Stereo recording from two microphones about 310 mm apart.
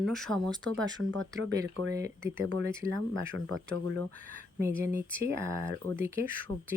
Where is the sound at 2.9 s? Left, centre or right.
Right.